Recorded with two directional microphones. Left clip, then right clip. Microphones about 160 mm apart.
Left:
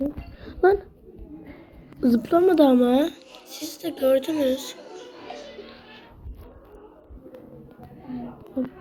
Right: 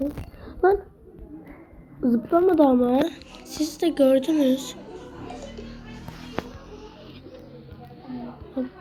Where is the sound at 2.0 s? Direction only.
50° left (ahead or behind).